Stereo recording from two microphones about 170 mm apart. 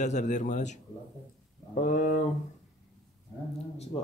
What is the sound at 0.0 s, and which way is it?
Speech, 45° left (ahead or behind).